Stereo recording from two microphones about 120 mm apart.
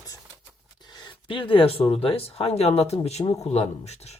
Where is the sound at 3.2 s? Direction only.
30° left (ahead or behind).